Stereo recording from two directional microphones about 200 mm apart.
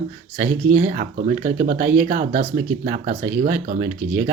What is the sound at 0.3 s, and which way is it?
Speech, 35° right (ahead or behind).